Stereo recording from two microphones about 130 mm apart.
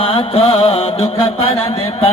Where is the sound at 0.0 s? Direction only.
50° left (ahead or behind).